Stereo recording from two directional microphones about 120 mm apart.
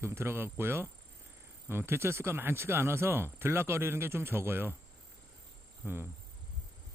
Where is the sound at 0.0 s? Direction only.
20° right (ahead or behind).